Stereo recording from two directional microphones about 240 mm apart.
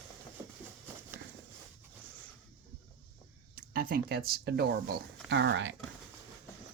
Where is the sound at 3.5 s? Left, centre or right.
Right.